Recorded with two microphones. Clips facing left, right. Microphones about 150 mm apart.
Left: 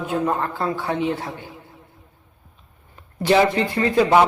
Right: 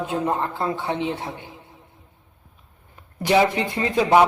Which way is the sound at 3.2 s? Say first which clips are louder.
Left 2 dB; 15° right (ahead or behind).